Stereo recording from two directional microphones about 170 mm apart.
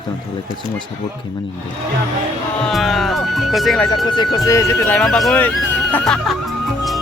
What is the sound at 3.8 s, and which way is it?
Speech, 25° left (ahead or behind).